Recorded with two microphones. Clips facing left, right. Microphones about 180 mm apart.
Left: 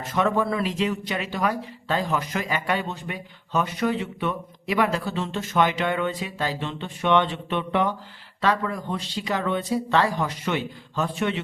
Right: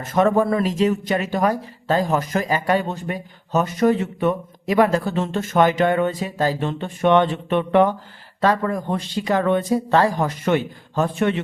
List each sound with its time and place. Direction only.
0.0 s speech: 45° right (ahead or behind)